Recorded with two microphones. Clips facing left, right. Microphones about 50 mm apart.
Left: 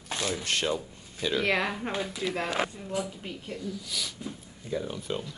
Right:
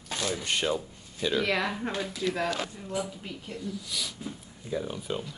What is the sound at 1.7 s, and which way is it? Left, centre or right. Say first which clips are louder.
Speech: even; centre.